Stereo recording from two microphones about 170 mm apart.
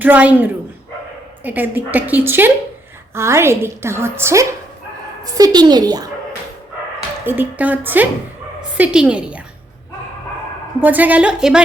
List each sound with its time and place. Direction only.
0.0 s a woman's voice: 10° right (ahead or behind)
7.3 s a woman's voice: 10° right (ahead or behind)
10.8 s a woman's voice: 10° right (ahead or behind)